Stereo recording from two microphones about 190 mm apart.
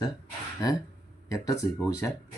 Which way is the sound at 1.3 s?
15° left (ahead or behind).